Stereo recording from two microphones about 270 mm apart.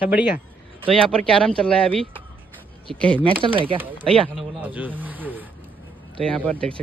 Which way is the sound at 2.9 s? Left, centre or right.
Centre.